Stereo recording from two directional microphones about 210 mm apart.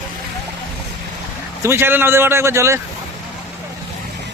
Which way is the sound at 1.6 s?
10° right (ahead or behind).